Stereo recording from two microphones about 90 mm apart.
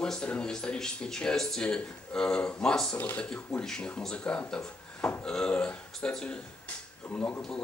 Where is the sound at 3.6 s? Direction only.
10° left (ahead or behind).